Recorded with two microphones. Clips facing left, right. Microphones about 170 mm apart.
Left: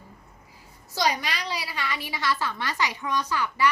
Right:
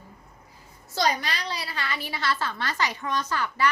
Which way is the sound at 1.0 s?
10° left (ahead or behind).